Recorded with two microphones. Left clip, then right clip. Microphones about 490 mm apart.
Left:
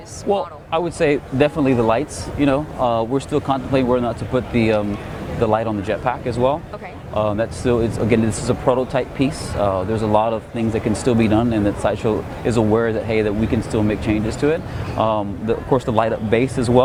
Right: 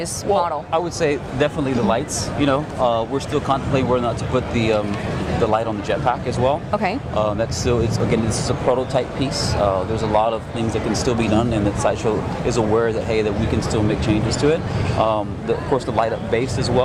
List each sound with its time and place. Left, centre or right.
0.3 s a man's voice: left